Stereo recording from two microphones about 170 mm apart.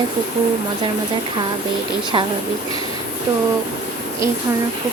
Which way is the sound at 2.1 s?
30° right (ahead or behind).